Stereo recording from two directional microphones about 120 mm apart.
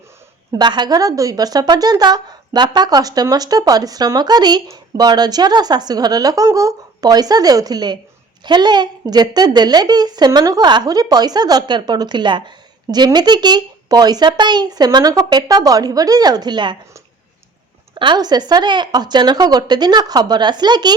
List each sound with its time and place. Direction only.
0.5 s a woman's voice: 35° right (ahead or behind)
17.9 s a woman's voice: 40° right (ahead or behind)